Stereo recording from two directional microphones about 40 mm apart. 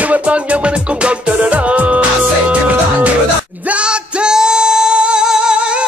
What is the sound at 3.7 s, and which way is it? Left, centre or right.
Music, right.